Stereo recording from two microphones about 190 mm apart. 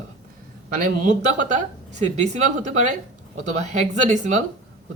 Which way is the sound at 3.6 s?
35° right (ahead or behind).